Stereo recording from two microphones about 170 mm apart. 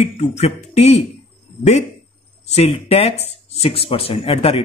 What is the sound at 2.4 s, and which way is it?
Speech, 40° left (ahead or behind).